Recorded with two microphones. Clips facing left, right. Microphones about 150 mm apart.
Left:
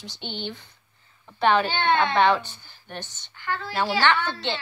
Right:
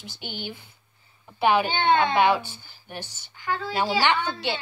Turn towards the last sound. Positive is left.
turn(degrees=-10)  # may be behind; listen again after turning